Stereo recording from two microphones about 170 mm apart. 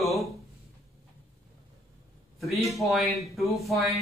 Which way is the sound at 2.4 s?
Centre (ahead or behind).